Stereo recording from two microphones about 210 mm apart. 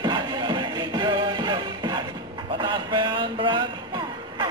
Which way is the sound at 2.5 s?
20° right (ahead or behind).